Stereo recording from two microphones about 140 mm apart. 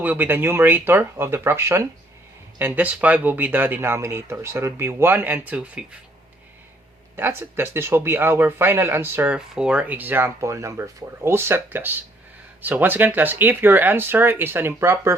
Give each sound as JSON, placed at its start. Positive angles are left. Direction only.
{"t": 0.0, "sound": "speech", "side_deg": -10}
{"t": 7.2, "sound": "speech", "side_deg": -15}